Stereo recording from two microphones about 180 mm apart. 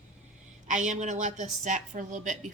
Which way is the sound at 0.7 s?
45° right (ahead or behind).